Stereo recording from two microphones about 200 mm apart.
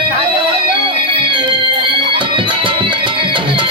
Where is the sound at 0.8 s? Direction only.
25° right (ahead or behind).